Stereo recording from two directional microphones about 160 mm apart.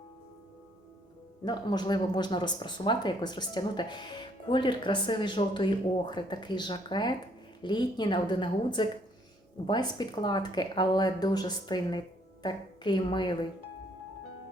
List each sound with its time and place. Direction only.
1.5 s speech: 25° left (ahead or behind)